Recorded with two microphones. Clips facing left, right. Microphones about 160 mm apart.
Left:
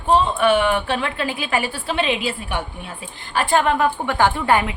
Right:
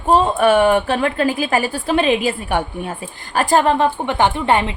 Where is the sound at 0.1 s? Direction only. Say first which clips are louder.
Right 3 dB; 45° right (ahead or behind).